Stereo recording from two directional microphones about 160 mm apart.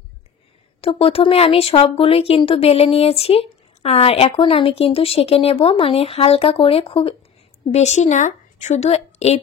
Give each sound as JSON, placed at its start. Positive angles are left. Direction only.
{"t": 0.7, "sound": "a woman's voice", "side_deg": 35}